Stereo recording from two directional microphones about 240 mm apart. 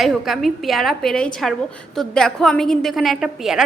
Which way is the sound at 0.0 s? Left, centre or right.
Centre.